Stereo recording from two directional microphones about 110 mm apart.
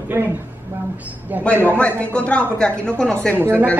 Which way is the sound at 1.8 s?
10° left (ahead or behind).